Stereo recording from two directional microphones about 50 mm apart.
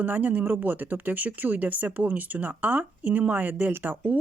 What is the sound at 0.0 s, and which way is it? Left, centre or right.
Speech, right.